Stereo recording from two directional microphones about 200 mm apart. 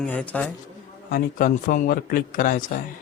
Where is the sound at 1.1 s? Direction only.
45° left (ahead or behind).